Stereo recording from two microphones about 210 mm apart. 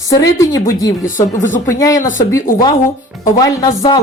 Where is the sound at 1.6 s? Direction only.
15° left (ahead or behind).